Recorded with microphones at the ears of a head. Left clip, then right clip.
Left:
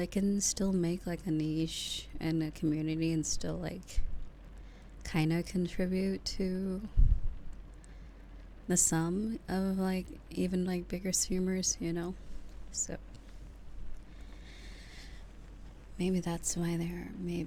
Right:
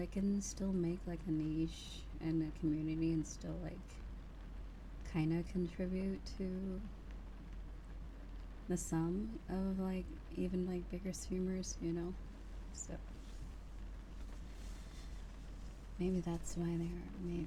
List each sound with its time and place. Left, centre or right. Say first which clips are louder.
0.0 s speech: left 8 dB; left
5.0 s speech: left 6 dB; left
8.6 s speech: left 8 dB; left
16.0 s speech: left 6 dB; left